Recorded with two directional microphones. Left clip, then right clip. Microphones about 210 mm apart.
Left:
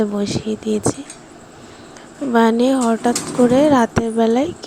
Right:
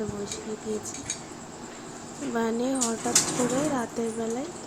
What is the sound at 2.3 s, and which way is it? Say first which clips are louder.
A woman's voice: left 13 dB; 40° left (ahead or behind).